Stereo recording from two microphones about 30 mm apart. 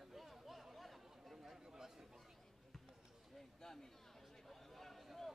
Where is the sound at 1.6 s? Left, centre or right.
Centre.